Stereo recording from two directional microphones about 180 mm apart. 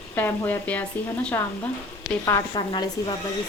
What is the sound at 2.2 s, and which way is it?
Speech, 20° left (ahead or behind).